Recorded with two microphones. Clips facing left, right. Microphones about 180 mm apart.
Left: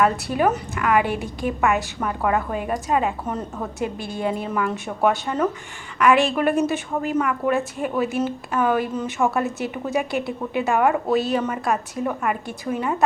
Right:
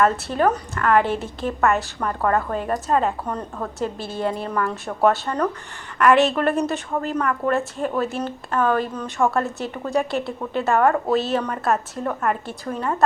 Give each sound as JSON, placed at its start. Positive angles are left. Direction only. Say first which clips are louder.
{"t": 0.0, "sound": "a woman's voice", "louder": "right 1 dB", "side_deg": 10}